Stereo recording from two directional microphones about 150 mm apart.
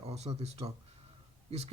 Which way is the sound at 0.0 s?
45° right (ahead or behind).